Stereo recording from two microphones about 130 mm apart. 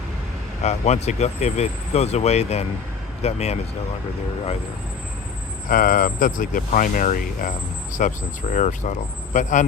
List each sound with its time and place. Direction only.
0.6 s speech: 60° left (ahead or behind)
5.6 s speech: 90° left
7.9 s speech: 70° left (ahead or behind)